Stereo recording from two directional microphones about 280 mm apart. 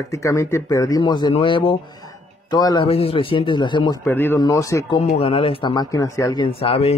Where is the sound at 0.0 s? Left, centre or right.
Centre.